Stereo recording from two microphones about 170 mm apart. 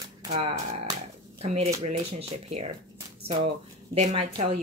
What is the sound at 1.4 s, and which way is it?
Speech, 40° right (ahead or behind).